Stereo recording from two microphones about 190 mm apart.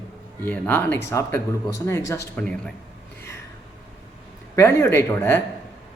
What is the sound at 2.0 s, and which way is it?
Speech, 15° left (ahead or behind).